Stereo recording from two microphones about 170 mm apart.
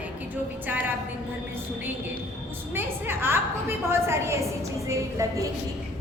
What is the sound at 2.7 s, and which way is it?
A woman's voice, 10° right (ahead or behind).